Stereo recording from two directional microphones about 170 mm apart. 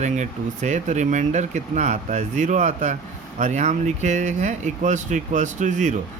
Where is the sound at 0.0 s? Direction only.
45° right (ahead or behind).